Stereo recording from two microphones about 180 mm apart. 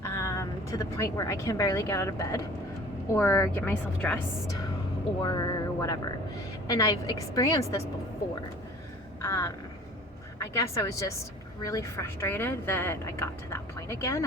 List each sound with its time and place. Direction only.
0.0 s a woman's voice: 15° left (ahead or behind)
5.2 s a woman's voice: 25° left (ahead or behind)
9.2 s a woman's voice: 15° left (ahead or behind)